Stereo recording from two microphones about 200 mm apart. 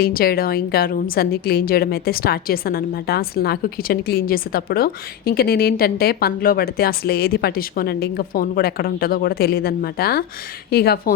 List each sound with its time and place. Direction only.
0.0 s a woman's voice: 50° left (ahead or behind)